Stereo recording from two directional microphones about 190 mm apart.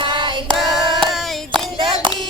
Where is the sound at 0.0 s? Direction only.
25° right (ahead or behind).